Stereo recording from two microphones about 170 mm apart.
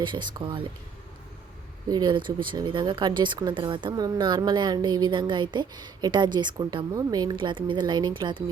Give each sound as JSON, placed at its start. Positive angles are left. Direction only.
{"t": 0.0, "sound": "speech", "side_deg": -25}
{"t": 1.9, "sound": "speech", "side_deg": -25}